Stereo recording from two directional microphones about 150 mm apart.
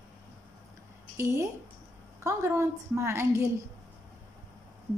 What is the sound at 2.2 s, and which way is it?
A woman's voice, 20° right (ahead or behind).